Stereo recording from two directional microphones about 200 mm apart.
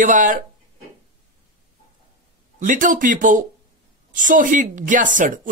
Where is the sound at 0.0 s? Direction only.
40° right (ahead or behind).